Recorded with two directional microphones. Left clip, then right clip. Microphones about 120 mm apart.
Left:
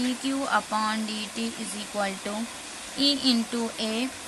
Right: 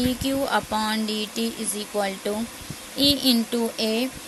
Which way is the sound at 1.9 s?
50° right (ahead or behind).